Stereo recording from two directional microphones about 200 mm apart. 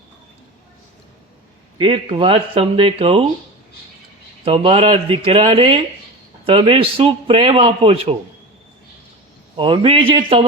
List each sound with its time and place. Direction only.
1.8 s a man's voice: 25° right (ahead or behind)
4.4 s a man's voice: 30° right (ahead or behind)
9.6 s a man's voice: 25° right (ahead or behind)